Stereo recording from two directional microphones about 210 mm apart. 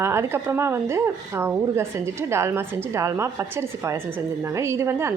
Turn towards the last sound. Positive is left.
turn(degrees=-15)  # may be behind; listen again after turning